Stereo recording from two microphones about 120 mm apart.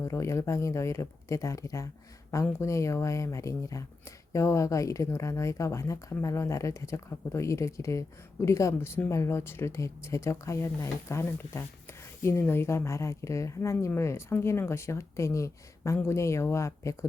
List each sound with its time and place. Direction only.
0.0 s speech: 25° left (ahead or behind)